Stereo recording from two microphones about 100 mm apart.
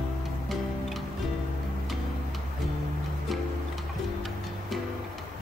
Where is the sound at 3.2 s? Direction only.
Centre (ahead or behind).